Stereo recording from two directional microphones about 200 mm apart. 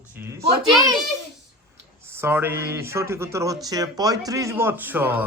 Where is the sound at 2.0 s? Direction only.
10° right (ahead or behind).